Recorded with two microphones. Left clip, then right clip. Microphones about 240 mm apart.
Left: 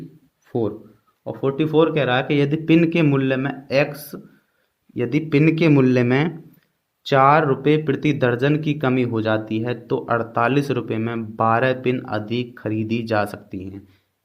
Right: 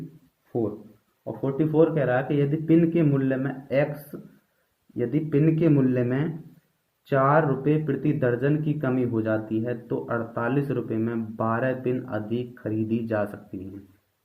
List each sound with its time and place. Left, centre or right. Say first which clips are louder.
1.2 s speech: left 5 dB; left